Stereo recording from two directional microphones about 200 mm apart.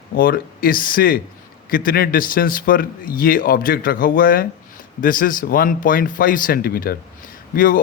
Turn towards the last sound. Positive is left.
turn(degrees=45)  # may be behind; listen again after turning